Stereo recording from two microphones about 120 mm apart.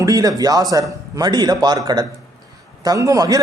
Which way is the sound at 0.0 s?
30° right (ahead or behind).